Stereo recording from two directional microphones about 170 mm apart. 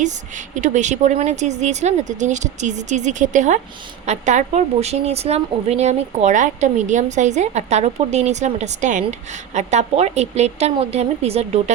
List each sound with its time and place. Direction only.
0.0 s a woman's voice: 45° right (ahead or behind)